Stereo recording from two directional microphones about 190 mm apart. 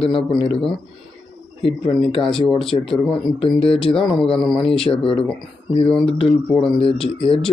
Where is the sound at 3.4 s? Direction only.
30° left (ahead or behind).